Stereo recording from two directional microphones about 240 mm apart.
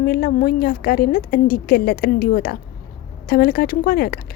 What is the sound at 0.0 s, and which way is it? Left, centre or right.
A woman's voice, left.